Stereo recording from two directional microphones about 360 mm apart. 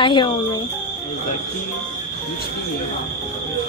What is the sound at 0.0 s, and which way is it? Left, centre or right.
Speech, centre.